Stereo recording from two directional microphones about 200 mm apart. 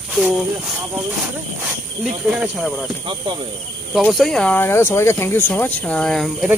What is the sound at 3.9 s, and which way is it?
Speech, centre (ahead or behind).